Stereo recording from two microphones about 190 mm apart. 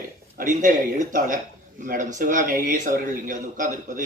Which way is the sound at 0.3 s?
45° right (ahead or behind).